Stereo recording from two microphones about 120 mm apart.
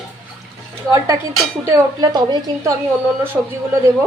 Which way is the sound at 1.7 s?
35° right (ahead or behind).